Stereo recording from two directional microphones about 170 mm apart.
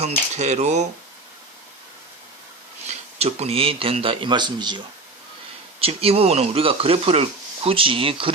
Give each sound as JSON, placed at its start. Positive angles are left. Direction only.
{"t": 0.0, "sound": "speech", "side_deg": -40}
{"t": 2.8, "sound": "speech", "side_deg": -40}
{"t": 5.8, "sound": "speech", "side_deg": -35}